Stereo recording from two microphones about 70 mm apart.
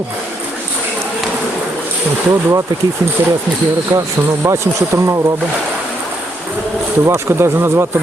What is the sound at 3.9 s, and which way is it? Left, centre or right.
Speech, right.